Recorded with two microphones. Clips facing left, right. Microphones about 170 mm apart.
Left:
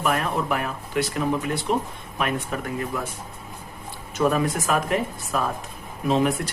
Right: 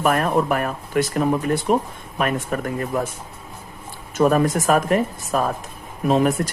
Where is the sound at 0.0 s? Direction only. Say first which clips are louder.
Right 5 dB; 50° right (ahead or behind).